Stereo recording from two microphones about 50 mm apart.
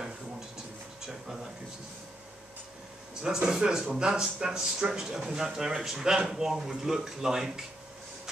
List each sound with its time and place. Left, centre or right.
3.2 s speech: centre